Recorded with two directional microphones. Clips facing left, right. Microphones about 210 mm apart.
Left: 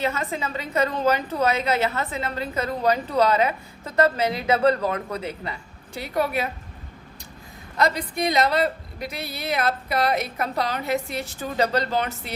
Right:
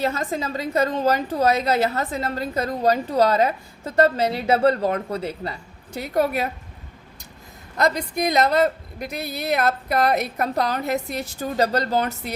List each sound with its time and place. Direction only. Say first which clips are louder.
0.0 s a woman's voice: right 2 dB; 35° right (ahead or behind)
7.8 s speech: right 2 dB; 45° right (ahead or behind)